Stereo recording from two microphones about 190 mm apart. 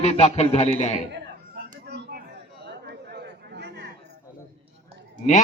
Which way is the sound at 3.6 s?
60° right (ahead or behind).